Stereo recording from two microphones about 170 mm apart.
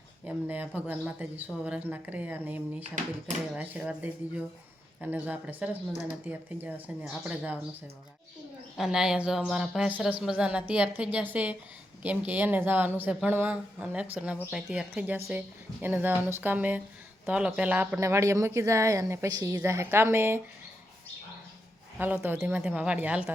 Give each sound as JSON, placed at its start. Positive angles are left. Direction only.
{"t": 0.3, "sound": "speech", "side_deg": -10}
{"t": 8.8, "sound": "speech", "side_deg": -5}
{"t": 21.9, "sound": "speech", "side_deg": -10}